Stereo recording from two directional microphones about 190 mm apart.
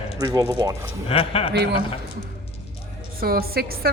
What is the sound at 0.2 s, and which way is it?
Speech, 20° right (ahead or behind).